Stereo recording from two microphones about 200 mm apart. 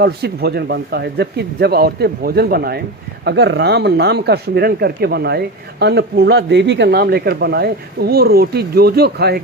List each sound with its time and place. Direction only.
0.0 s speech: 55° right (ahead or behind)